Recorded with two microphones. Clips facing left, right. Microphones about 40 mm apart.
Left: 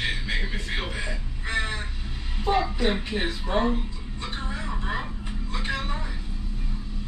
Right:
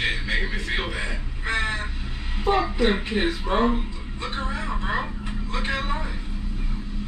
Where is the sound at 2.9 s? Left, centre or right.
Centre.